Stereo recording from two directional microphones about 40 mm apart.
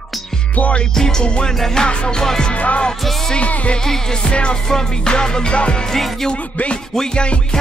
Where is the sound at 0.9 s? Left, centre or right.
Centre.